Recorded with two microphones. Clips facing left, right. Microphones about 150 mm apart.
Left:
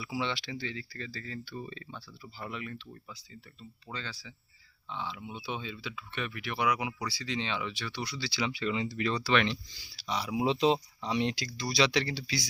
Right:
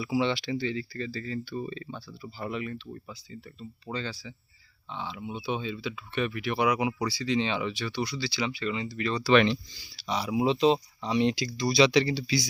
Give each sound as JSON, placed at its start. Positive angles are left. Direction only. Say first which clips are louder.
{"t": 0.0, "sound": "speech", "louder": "right 7 dB", "side_deg": -15}
{"t": 1.9, "sound": "speech", "louder": "right 6 dB", "side_deg": -25}
{"t": 8.3, "sound": "speech", "louder": "right 1 dB", "side_deg": 5}
{"t": 9.2, "sound": "speech", "louder": "right 10 dB", "side_deg": -15}
{"t": 10.4, "sound": "speech", "louder": "right 3 dB", "side_deg": 10}
{"t": 11.4, "sound": "speech", "louder": "right 6 dB", "side_deg": -15}